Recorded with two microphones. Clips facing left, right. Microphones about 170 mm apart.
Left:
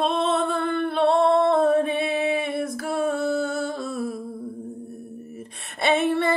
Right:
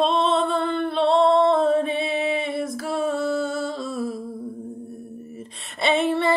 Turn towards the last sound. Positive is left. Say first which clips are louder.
# even
turn(degrees=55)  # may be behind; listen again after turning